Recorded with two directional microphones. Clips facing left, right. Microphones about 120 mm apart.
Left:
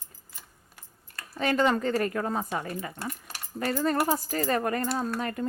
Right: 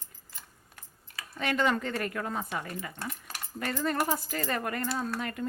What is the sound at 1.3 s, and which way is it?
Speech, 35° left (ahead or behind).